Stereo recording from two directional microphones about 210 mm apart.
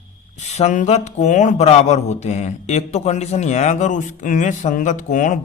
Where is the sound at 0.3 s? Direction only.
30° left (ahead or behind).